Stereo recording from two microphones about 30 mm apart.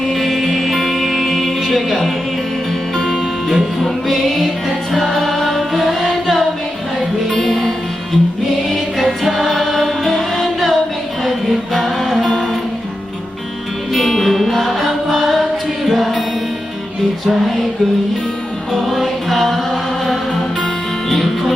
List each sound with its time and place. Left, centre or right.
0.1 s music: centre
3.1 s music: centre
7.4 s music: centre
9.0 s music: centre
13.9 s music: centre
18.7 s music: centre